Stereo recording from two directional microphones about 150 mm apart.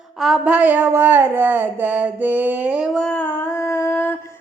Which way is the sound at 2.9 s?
5° left (ahead or behind).